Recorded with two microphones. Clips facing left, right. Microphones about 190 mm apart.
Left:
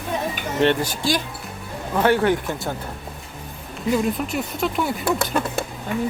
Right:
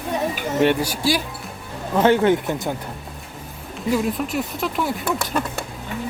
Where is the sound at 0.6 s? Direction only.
10° right (ahead or behind).